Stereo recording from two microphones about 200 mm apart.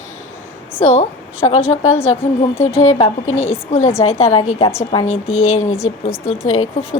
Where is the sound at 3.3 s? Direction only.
90° left.